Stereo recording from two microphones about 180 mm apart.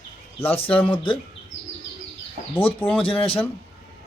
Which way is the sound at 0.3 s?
35° left (ahead or behind).